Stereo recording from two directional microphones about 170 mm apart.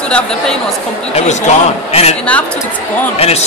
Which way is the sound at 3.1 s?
35° left (ahead or behind).